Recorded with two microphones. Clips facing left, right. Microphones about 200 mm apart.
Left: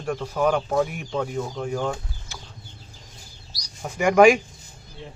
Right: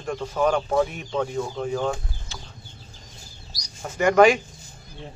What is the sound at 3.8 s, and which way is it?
Speech, 10° left (ahead or behind).